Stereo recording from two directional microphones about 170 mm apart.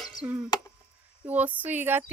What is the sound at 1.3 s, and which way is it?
Speech, 10° right (ahead or behind).